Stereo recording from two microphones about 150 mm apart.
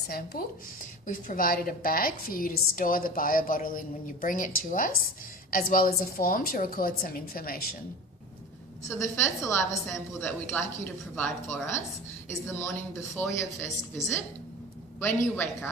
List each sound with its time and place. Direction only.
0.1 s speech: 80° left
1.0 s a woman's voice: 60° left (ahead or behind); by 7.8 s 85° left
8.9 s speech: 15° left (ahead or behind)
15.0 s speech: 15° left (ahead or behind)